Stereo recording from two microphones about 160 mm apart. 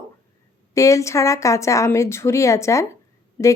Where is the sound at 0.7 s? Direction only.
20° left (ahead or behind).